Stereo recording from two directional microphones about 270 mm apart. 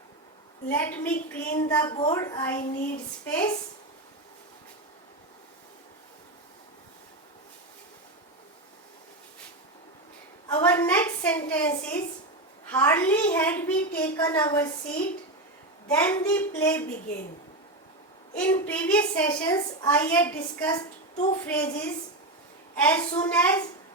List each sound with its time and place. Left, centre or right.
0.7 s a child's voice: centre
10.5 s a child's voice: centre
15.9 s a woman's voice: centre
18.3 s a child's voice: centre